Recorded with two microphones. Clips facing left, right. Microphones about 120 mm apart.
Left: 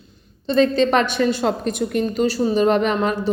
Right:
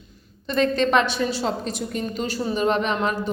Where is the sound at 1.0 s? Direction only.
50° left (ahead or behind).